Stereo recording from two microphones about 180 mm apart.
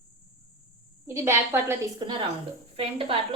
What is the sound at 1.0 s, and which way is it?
Speech, 15° right (ahead or behind).